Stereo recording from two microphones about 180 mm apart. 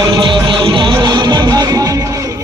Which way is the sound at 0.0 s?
25° right (ahead or behind).